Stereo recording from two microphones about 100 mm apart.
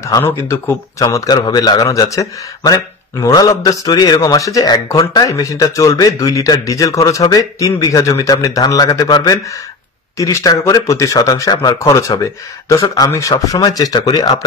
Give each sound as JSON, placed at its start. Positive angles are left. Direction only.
{"t": 0.2, "sound": "speech", "side_deg": 25}
{"t": 1.0, "sound": "speech", "side_deg": 40}